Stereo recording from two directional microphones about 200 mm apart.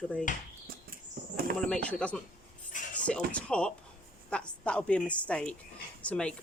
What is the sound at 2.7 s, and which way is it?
Dishes, 40° left (ahead or behind).